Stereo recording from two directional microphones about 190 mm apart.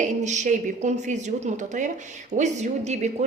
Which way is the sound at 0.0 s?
40° right (ahead or behind).